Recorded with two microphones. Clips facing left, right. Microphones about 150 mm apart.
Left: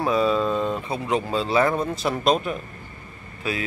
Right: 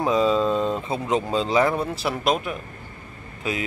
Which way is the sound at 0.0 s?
20° right (ahead or behind).